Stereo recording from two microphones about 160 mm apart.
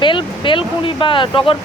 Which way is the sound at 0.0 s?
30° left (ahead or behind).